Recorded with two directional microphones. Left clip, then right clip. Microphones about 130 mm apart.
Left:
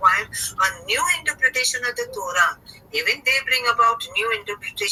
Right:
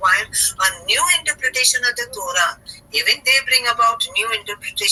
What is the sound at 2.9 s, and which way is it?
Speech, 20° right (ahead or behind).